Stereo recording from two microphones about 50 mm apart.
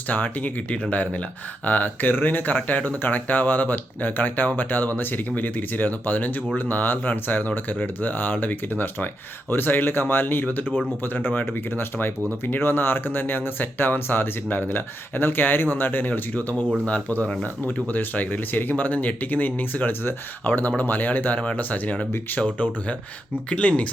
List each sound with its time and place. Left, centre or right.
0.1 s speech: left
20.5 s speech: left